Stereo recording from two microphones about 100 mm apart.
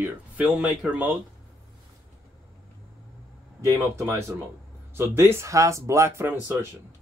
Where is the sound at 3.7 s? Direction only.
30° right (ahead or behind).